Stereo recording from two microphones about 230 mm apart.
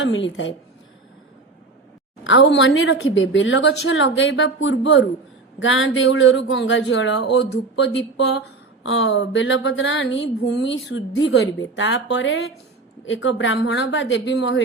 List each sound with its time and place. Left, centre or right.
0.0 s speech: left
2.2 s speech: left